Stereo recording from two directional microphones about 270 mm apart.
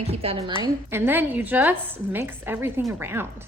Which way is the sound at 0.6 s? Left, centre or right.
Centre.